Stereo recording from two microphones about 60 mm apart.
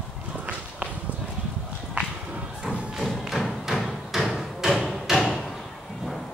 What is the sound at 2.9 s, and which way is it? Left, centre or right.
Thump, centre.